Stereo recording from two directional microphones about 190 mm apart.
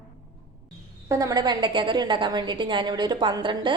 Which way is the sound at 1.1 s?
15° right (ahead or behind).